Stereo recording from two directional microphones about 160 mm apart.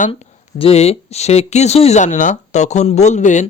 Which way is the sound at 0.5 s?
40° left (ahead or behind).